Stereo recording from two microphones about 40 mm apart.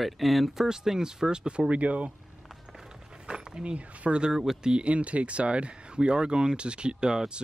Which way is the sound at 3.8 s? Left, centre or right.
Right.